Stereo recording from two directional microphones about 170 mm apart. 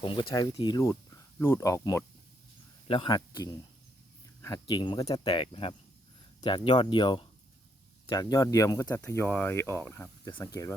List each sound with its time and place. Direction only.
0.0 s speech: 30° left (ahead or behind)
2.8 s speech: 30° left (ahead or behind)
4.6 s speech: 25° left (ahead or behind)